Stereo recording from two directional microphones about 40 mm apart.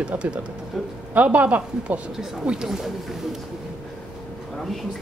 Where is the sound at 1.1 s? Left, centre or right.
Right.